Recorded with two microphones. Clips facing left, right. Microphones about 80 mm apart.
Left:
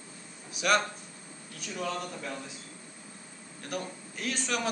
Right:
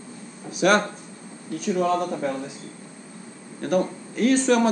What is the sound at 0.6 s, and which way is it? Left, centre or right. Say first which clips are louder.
Speech: right 8 dB; right.